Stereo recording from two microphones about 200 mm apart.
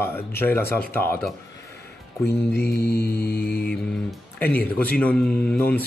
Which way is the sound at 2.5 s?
50° left (ahead or behind).